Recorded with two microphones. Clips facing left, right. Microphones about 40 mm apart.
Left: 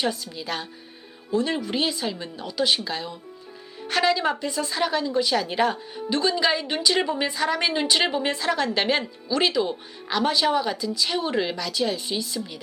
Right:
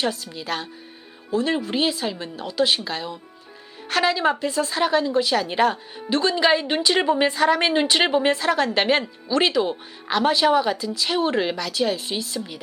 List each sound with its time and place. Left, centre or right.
0.3 s a woman's voice: centre